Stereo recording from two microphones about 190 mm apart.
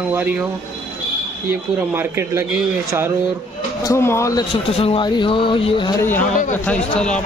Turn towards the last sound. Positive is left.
turn(degrees=5)  # may be behind; listen again after turning